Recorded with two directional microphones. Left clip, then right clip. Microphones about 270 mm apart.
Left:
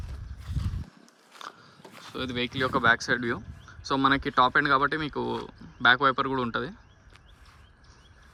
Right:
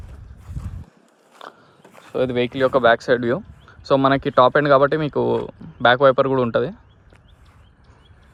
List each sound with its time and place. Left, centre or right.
0.4 s horse: centre
1.4 s biting: left
1.9 s speech: centre